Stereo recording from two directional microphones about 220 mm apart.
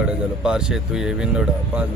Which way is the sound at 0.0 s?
5° right (ahead or behind).